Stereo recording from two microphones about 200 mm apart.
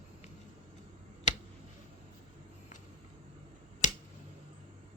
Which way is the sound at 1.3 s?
35° left (ahead or behind).